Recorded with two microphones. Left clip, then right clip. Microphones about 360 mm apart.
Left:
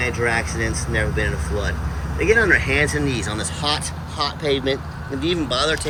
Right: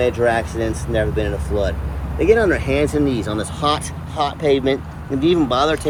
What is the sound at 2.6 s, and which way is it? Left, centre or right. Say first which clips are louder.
Speech: right 2 dB; centre.